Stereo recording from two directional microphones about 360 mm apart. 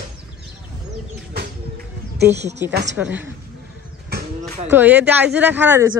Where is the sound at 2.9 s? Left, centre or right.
Centre.